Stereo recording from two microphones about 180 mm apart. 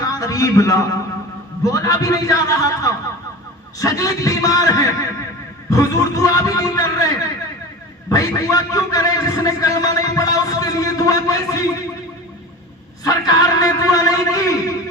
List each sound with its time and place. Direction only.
0.0 s a man's voice: 20° left (ahead or behind)
8.1 s a man's voice: 20° left (ahead or behind)
13.1 s a man's voice: 20° left (ahead or behind)